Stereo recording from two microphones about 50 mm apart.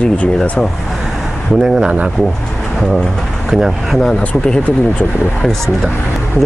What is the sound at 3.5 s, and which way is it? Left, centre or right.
Speech, centre.